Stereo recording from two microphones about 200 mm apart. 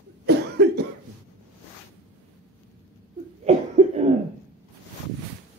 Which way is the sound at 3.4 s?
35° right (ahead or behind).